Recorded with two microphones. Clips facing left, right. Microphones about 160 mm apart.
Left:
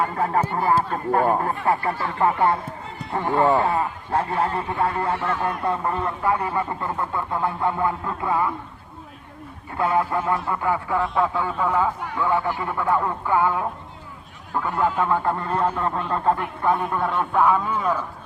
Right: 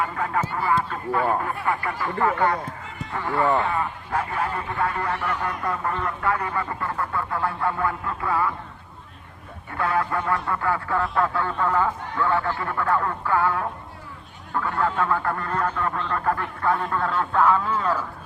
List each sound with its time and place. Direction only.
0.2 s speech: 35° left (ahead or behind)
2.1 s a man's voice: 20° left (ahead or behind)
3.2 s speech: 20° left (ahead or behind)
3.6 s speech: 35° left (ahead or behind)
9.7 s speech: 25° left (ahead or behind)